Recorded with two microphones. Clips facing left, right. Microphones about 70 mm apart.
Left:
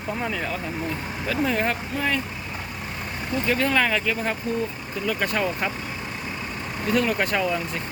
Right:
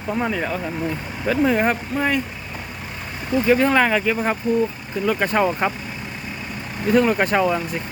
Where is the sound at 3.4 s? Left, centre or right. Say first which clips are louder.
Right 6 dB; right.